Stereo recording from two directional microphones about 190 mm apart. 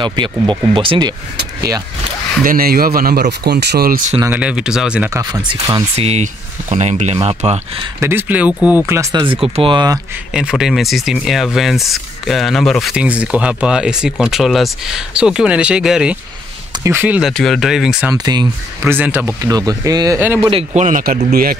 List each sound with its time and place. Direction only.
0.0 s speech: 25° right (ahead or behind)
2.4 s speech: 50° right (ahead or behind)
4.2 s speech: 10° right (ahead or behind)
5.2 s speech: 20° right (ahead or behind)
5.9 s speech: 35° right (ahead or behind)
8.0 s speech: 10° right (ahead or behind)
10.3 s speech: 5° right (ahead or behind)
18.1 s speech: 20° right (ahead or behind)
20.7 s speech: 40° right (ahead or behind)